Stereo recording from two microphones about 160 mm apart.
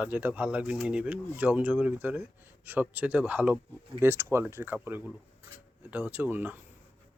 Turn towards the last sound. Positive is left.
turn(degrees=-10)  # may be behind; listen again after turning